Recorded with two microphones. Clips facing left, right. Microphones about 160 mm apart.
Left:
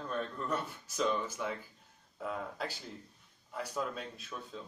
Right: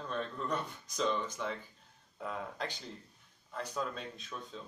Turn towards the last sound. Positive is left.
turn(degrees=5)  # may be behind; listen again after turning